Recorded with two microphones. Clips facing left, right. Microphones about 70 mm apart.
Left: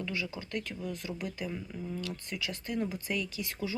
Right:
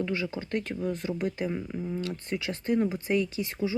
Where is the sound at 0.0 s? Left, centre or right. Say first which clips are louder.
Right 6 dB; right.